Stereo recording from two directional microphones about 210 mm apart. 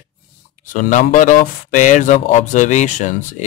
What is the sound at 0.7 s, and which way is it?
Speech, 40° left (ahead or behind).